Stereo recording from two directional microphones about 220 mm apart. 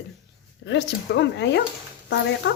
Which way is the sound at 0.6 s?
55° left (ahead or behind).